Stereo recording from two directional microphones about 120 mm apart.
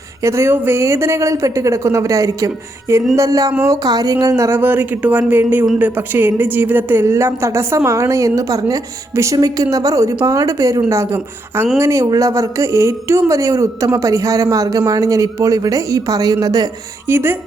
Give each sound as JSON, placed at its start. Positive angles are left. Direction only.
{"t": 0.2, "sound": "a woman's voice", "side_deg": -25}
{"t": 17.1, "sound": "speech", "side_deg": -20}